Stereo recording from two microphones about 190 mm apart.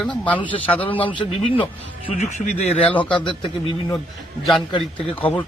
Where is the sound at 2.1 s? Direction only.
40° left (ahead or behind).